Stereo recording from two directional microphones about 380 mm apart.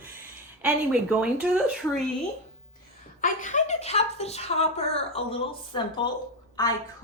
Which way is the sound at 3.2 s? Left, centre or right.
Centre.